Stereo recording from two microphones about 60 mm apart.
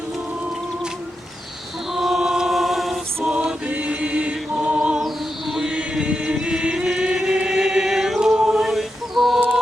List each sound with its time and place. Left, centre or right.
1.9 s mantra: centre
3.3 s chant: right
4.9 s chant: centre
8.4 s a sound: centre